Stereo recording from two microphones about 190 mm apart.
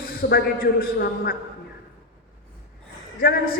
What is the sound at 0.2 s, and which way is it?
A man's voice, 55° left (ahead or behind).